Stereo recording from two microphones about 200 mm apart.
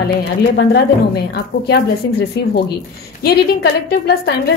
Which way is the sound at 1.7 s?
55° left (ahead or behind).